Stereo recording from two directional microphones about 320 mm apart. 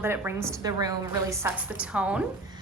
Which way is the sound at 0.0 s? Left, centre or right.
Centre.